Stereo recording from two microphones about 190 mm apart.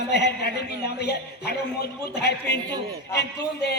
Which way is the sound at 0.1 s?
60° left (ahead or behind).